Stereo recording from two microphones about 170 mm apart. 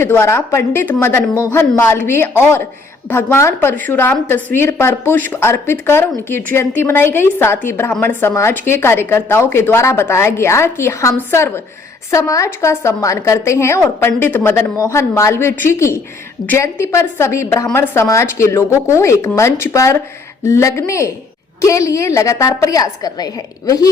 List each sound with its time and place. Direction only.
0.0 s a woman's voice: 15° left (ahead or behind)